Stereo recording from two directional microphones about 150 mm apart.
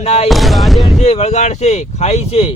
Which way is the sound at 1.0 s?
45° left (ahead or behind).